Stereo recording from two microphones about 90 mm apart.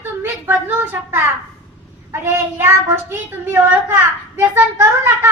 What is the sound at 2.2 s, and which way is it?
Speech, 30° right (ahead or behind).